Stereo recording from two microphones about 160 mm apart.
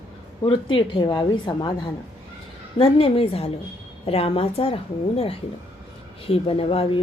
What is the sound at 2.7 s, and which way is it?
A woman's voice, 35° left (ahead or behind).